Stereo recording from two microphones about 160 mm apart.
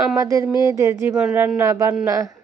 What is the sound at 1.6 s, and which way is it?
Speech, 15° right (ahead or behind).